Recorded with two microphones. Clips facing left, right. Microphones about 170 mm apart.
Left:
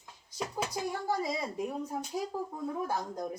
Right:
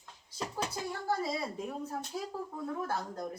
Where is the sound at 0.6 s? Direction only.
15° left (ahead or behind).